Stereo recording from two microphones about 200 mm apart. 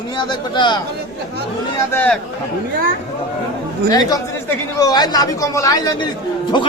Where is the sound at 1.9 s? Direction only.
5° left (ahead or behind).